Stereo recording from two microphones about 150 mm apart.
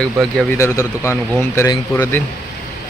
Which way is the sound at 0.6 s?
20° left (ahead or behind).